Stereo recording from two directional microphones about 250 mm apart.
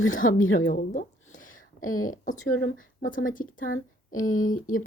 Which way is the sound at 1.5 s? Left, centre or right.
Left.